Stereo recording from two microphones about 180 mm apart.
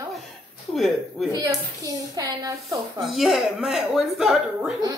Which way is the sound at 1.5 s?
20° right (ahead or behind).